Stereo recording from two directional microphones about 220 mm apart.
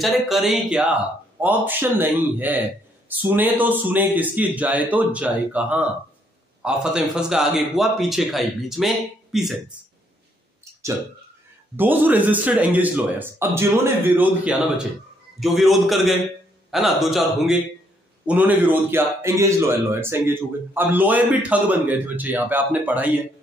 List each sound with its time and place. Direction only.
0.0 s a man's voice: centre (ahead or behind)
11.7 s a man's voice: 10° right (ahead or behind)